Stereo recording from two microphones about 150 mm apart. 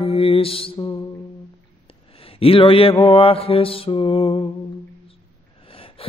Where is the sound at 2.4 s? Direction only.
35° left (ahead or behind).